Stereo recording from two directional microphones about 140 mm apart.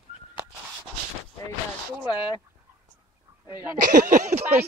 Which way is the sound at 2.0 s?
30° left (ahead or behind).